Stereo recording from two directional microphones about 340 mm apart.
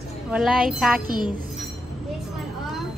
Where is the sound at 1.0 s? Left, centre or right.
Right.